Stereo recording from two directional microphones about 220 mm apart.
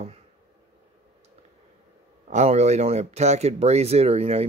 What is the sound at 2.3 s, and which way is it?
Speech, 30° right (ahead or behind).